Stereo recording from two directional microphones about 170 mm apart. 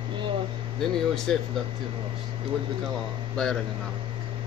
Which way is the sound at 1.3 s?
5° left (ahead or behind).